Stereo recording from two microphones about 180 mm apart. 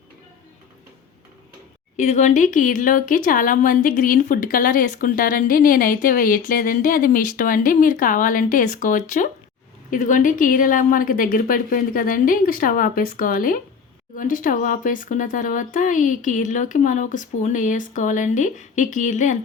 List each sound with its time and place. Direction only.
2.0 s a woman's voice: 40° left (ahead or behind)